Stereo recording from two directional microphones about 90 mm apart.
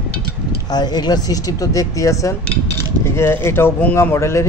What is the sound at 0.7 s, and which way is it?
A man's voice, 50° left (ahead or behind).